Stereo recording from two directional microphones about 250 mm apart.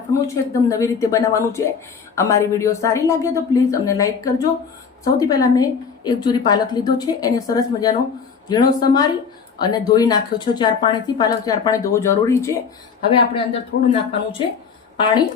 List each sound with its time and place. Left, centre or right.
0.1 s a woman's voice: centre